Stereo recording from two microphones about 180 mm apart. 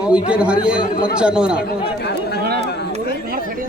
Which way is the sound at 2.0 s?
65° left (ahead or behind).